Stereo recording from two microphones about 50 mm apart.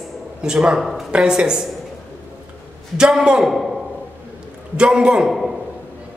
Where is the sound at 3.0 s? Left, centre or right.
Centre.